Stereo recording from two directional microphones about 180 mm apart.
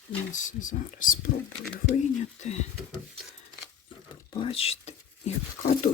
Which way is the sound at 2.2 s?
40° left (ahead or behind).